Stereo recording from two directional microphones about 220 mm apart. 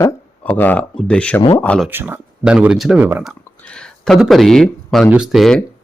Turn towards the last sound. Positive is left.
turn(degrees=0)  # may be behind; listen again after turning